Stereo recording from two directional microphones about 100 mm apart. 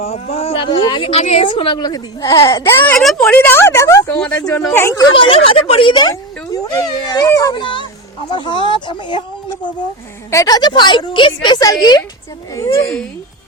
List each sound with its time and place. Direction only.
0.0 s speech: 90° left
0.9 s a woman's voice: 55° left (ahead or behind)
1.1 s a woman's voice: 85° left; by 2.6 s 40° left (ahead or behind)
2.6 s speech: 25° left (ahead or behind)
3.0 s a woman's voice: centre (ahead or behind)
3.2 s speech: 20° left (ahead or behind)
4.2 s speech: 10° left (ahead or behind)
4.7 s speech: 25° left (ahead or behind)
5.1 s speech: 60° left (ahead or behind)
6.1 s dog: 40° left (ahead or behind)
7.5 s speech: 55° left (ahead or behind)
10.3 s a woman's voice: 40° left (ahead or behind)
12.5 s speech: 30° left (ahead or behind)